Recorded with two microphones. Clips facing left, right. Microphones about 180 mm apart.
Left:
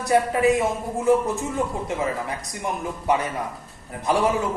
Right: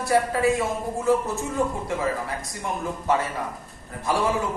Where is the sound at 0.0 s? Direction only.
20° left (ahead or behind).